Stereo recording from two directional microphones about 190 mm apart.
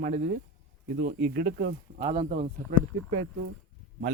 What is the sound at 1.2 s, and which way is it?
Speech, 50° right (ahead or behind).